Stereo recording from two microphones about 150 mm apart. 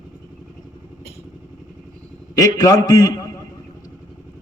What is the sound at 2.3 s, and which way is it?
Speech, 25° left (ahead or behind).